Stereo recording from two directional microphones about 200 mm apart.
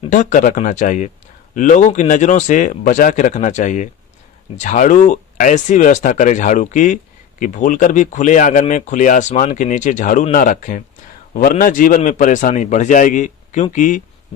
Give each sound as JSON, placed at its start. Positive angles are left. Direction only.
{"t": 0.1, "sound": "speech", "side_deg": 40}